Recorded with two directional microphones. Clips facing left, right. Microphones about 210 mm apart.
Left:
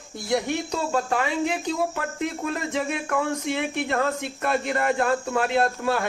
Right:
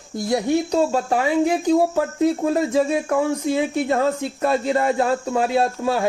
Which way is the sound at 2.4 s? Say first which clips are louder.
Right 8 dB; 25° right (ahead or behind).